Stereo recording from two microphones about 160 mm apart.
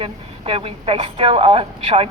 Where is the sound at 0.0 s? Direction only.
35° right (ahead or behind).